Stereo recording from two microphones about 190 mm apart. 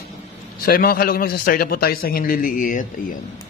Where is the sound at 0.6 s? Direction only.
55° left (ahead or behind).